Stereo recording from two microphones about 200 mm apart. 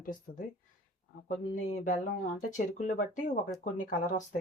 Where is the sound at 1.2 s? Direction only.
40° left (ahead or behind).